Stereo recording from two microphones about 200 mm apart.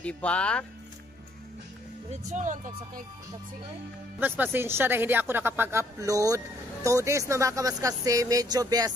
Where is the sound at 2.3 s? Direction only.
40° right (ahead or behind).